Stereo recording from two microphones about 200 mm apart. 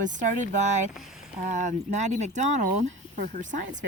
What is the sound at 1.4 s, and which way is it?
Speech, 35° right (ahead or behind).